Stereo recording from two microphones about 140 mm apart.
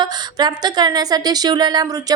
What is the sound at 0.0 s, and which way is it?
Speech, 30° right (ahead or behind).